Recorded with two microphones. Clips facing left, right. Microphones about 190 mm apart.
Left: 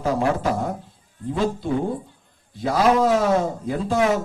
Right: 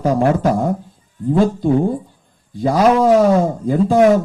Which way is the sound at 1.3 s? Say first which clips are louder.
Right 8 dB; 50° right (ahead or behind).